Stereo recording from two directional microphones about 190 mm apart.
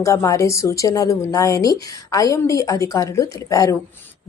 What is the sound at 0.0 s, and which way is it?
A woman's voice, 15° left (ahead or behind).